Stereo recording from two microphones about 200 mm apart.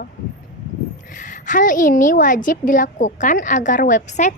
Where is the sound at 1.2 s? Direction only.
40° left (ahead or behind).